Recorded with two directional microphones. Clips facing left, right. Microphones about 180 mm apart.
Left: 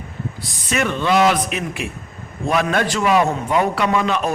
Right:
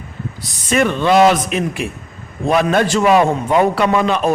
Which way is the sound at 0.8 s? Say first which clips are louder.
Right 5 dB; 35° right (ahead or behind).